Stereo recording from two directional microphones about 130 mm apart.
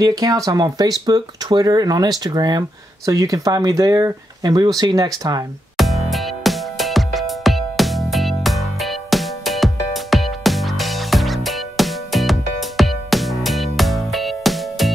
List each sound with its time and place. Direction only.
0.0 s speech: 25° right (ahead or behind)
5.8 s music: centre (ahead or behind)